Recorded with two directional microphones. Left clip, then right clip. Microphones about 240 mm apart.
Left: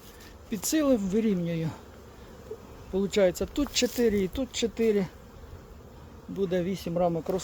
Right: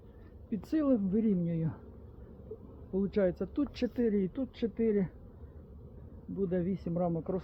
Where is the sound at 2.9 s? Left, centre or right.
Centre.